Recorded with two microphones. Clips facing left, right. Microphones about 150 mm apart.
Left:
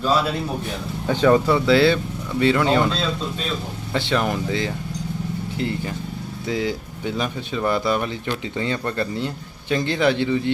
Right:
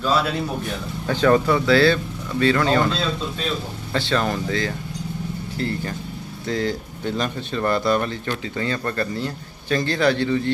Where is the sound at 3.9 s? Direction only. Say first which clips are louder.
Even; 15° left (ahead or behind).